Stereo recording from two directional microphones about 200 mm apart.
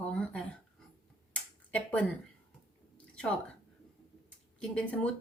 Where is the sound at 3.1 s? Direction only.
5° left (ahead or behind).